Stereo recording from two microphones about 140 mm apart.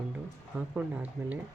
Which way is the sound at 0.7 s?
10° right (ahead or behind).